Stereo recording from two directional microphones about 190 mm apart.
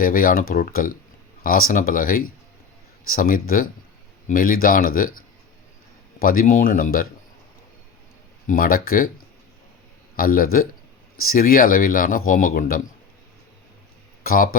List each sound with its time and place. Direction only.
0.0 s speech: 50° left (ahead or behind)
8.4 s speech: 50° left (ahead or behind)
14.3 s speech: 50° left (ahead or behind)